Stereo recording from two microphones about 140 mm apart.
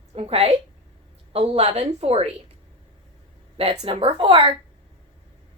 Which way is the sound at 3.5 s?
45° right (ahead or behind).